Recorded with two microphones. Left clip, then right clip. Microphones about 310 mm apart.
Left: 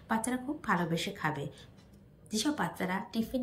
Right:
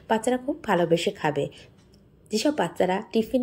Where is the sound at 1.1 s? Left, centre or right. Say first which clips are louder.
Right 9 dB; right.